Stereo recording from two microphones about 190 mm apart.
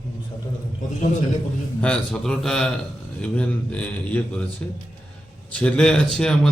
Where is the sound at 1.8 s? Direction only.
5° left (ahead or behind).